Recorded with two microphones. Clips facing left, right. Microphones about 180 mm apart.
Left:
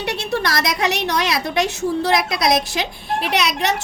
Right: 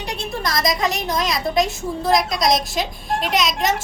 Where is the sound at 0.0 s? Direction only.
75° left (ahead or behind).